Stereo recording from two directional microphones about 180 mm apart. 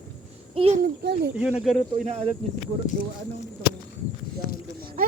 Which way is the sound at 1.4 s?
5° right (ahead or behind).